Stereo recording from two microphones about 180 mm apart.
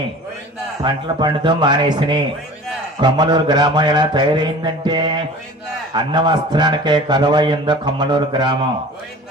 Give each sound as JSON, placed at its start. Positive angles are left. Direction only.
{"t": 0.8, "sound": "speech", "side_deg": -25}